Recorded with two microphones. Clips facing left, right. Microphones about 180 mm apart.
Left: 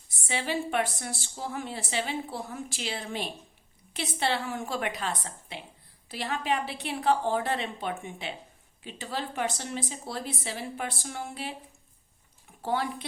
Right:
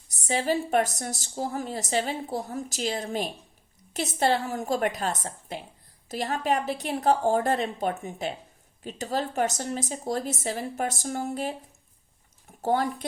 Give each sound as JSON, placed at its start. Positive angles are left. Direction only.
{"t": 0.1, "sound": "a woman's voice", "side_deg": -40}